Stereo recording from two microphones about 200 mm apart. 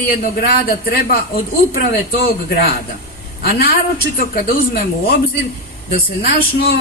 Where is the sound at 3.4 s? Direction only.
50° left (ahead or behind).